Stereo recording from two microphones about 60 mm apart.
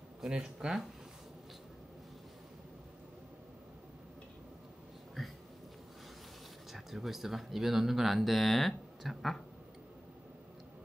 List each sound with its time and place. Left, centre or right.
0.2 s speech: centre
6.7 s speech: centre